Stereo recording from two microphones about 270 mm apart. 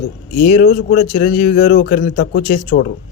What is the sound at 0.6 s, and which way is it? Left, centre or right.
Speech, left.